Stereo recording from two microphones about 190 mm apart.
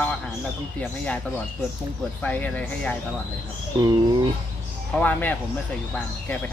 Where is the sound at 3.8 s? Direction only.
20° right (ahead or behind).